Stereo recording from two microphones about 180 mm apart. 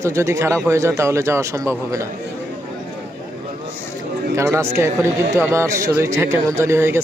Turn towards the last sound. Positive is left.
turn(degrees=-15)  # may be behind; listen again after turning